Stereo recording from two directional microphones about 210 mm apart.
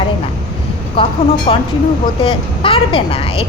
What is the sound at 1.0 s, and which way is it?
A woman's voice, 25° left (ahead or behind).